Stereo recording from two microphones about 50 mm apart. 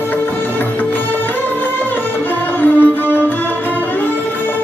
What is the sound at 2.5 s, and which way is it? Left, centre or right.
Music, left.